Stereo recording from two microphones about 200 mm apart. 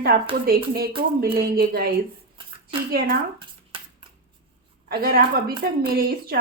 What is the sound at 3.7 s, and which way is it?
Shuffling cards, 25° right (ahead or behind).